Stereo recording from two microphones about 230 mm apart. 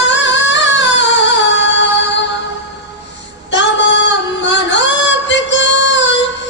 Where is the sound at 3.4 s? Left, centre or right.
Left.